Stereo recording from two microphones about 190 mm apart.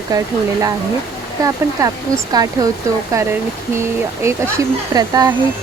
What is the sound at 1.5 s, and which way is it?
Speech, 20° right (ahead or behind).